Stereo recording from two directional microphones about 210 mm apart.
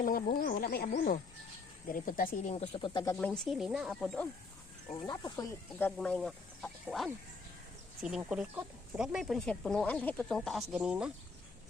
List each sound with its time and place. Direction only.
0.0 s speech: 40° left (ahead or behind); by 3.2 s 20° left (ahead or behind)
3.2 s speech: 5° left (ahead or behind)
5.0 s speech: 20° left (ahead or behind)
6.0 s speech: 5° left (ahead or behind)